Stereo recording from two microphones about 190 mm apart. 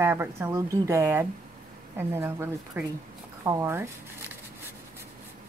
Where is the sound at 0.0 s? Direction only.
10° right (ahead or behind).